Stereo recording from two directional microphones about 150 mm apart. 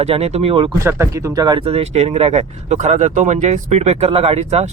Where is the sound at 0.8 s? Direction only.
20° right (ahead or behind).